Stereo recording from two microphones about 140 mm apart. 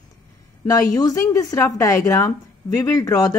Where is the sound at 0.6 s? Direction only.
25° left (ahead or behind).